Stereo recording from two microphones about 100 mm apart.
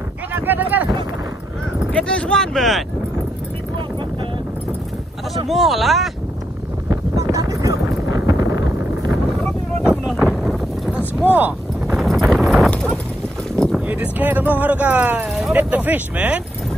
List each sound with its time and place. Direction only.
0.3 s a sound: 20° right (ahead or behind)
1.9 s speech: 10° left (ahead or behind)
5.3 s speech: centre (ahead or behind)
6.9 s a sound: 35° right (ahead or behind)
9.8 s boat: 5° right (ahead or behind)
11.2 s speech: 15° right (ahead or behind)
11.9 s clip-clop: centre (ahead or behind)
12.7 s clip-clop: 10° left (ahead or behind)
13.7 s speech: 15° right (ahead or behind)